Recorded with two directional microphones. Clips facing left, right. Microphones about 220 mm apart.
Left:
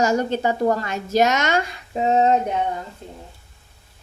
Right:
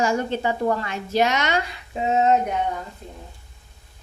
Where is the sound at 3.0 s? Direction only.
30° left (ahead or behind).